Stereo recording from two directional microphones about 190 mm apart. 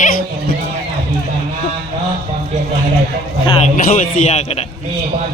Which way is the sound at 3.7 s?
40° left (ahead or behind).